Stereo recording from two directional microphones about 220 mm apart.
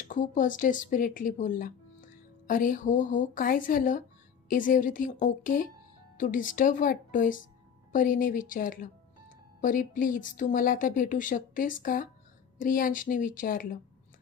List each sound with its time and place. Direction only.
0.1 s speech: 35° left (ahead or behind)